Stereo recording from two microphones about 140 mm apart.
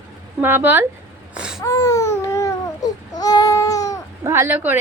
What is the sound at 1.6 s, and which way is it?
Baby cry, 20° left (ahead or behind).